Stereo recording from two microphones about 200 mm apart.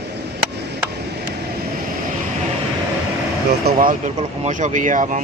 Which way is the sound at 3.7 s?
45° right (ahead or behind).